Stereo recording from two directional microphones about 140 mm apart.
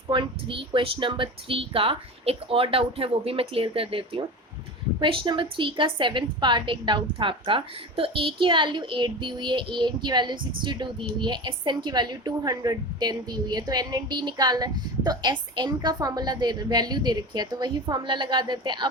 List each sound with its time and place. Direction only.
0.1 s a woman's voice: 35° right (ahead or behind)